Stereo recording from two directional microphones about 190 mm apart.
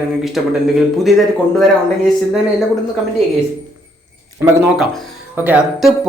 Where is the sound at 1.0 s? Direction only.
Centre (ahead or behind).